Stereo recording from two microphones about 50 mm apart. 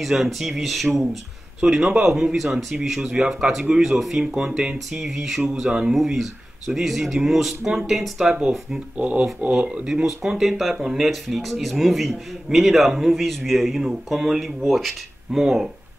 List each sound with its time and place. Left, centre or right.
0.0 s speech: centre
5.9 s speech: centre
8.9 s speech: right
10.0 s speech: centre